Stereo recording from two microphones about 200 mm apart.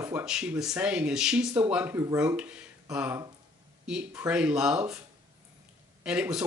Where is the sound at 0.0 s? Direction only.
5° right (ahead or behind).